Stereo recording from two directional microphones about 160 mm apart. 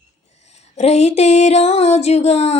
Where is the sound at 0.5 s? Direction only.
45° left (ahead or behind).